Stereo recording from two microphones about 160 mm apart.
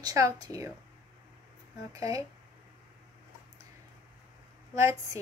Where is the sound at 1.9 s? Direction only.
20° right (ahead or behind).